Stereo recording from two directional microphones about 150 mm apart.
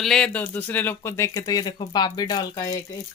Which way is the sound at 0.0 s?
5° left (ahead or behind).